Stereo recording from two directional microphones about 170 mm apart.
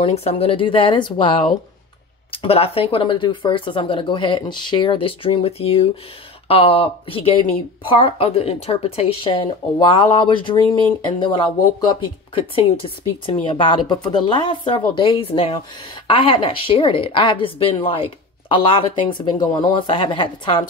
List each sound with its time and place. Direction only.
0.0 s speech: 35° left (ahead or behind)
13.2 s speech: 30° left (ahead or behind)